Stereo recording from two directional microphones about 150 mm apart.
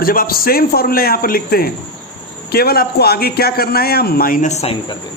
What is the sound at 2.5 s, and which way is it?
A man's voice, 90° left.